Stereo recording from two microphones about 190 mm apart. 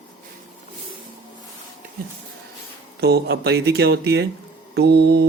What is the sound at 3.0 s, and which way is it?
Speech, 60° right (ahead or behind).